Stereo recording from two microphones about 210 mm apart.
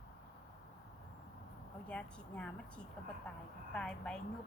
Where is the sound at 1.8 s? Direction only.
5° left (ahead or behind).